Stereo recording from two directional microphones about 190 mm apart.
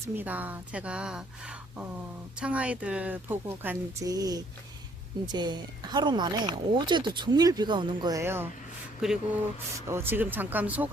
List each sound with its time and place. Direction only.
0.2 s speech: 10° right (ahead or behind)
2.4 s speech: 5° right (ahead or behind)
9.0 s speech: 5° right (ahead or behind)